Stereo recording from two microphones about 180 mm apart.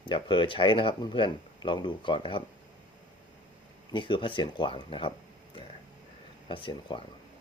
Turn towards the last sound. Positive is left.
turn(degrees=25)  # may be behind; listen again after turning